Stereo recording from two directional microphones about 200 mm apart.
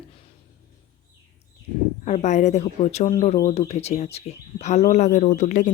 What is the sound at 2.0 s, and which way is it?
Speech, 35° left (ahead or behind).